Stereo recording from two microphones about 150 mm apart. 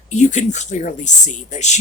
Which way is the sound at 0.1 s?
50° left (ahead or behind).